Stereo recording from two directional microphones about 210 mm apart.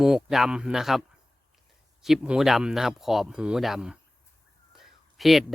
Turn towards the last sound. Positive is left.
turn(degrees=0)  # may be behind; listen again after turning